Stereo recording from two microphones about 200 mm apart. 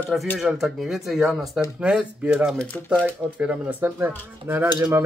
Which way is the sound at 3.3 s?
10° right (ahead or behind).